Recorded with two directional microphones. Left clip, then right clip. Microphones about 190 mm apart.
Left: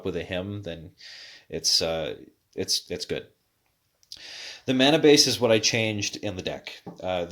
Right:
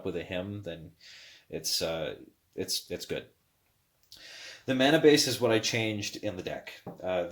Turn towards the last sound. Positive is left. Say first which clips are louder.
# left 2 dB
turn(degrees=50)  # may be behind; listen again after turning